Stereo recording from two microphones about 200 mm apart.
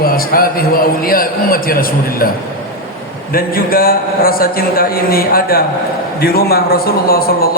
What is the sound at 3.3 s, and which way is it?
A man's voice, 45° left (ahead or behind).